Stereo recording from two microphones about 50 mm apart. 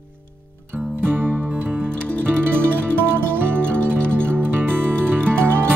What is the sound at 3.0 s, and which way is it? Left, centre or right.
Music, right.